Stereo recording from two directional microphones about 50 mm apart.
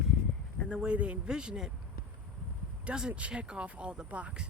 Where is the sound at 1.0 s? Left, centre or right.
Right.